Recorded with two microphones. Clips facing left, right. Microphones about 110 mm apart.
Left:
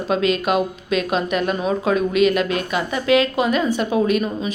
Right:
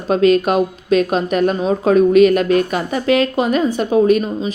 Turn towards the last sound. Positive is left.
turn(degrees=-35)  # may be behind; listen again after turning